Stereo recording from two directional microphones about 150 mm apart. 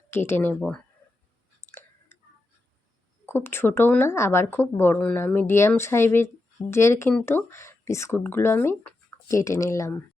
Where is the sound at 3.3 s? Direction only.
15° left (ahead or behind).